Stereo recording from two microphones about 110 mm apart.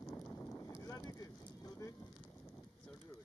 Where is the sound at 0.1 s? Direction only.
15° left (ahead or behind); by 1.3 s 35° left (ahead or behind).